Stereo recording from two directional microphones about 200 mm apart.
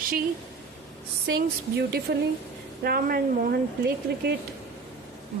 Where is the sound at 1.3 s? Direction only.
55° right (ahead or behind).